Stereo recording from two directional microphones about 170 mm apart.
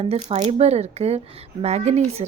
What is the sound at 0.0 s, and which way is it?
Speech, 35° right (ahead or behind).